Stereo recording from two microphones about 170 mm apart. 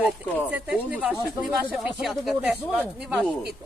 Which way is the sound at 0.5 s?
10° right (ahead or behind).